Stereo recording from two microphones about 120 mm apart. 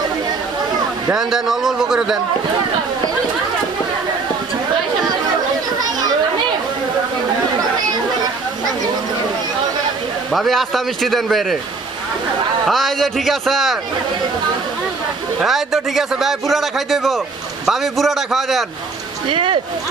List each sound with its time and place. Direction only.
1.1 s a man's voice: 5° right (ahead or behind)
10.3 s a man's voice: centre (ahead or behind)
12.6 s a man's voice: centre (ahead or behind)
15.4 s a man's voice: centre (ahead or behind)
19.3 s speech: 45° right (ahead or behind)